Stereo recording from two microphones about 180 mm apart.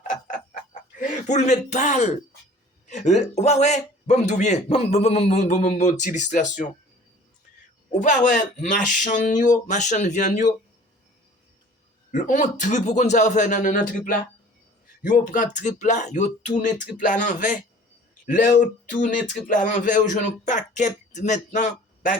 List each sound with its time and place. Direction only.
0.1 s a sound: 45° left (ahead or behind)
2.8 s a man's voice: 40° left (ahead or behind)
7.9 s speech: 45° left (ahead or behind)
12.1 s speech: 45° left (ahead or behind)